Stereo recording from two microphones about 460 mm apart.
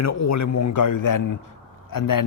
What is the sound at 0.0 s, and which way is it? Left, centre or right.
A man's voice, left.